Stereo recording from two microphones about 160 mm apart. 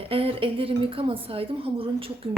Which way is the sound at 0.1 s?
35° right (ahead or behind).